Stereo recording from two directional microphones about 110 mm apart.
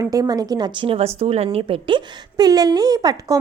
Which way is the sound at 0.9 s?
70° right (ahead or behind).